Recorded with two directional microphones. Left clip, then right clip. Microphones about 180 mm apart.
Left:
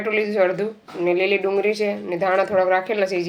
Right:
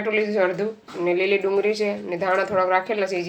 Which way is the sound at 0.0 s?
20° left (ahead or behind).